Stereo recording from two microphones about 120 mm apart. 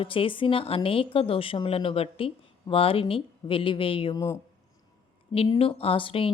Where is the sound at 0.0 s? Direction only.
45° left (ahead or behind).